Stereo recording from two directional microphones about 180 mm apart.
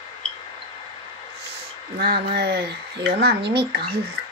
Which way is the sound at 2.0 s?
60° right (ahead or behind).